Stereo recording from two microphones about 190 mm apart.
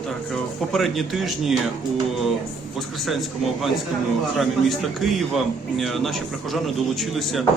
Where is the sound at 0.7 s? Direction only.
Centre (ahead or behind).